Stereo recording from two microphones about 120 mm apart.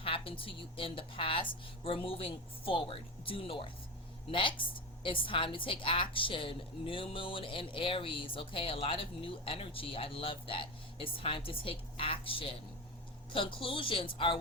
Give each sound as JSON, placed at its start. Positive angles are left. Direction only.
{"t": 0.0, "sound": "a woman's voice", "side_deg": 50}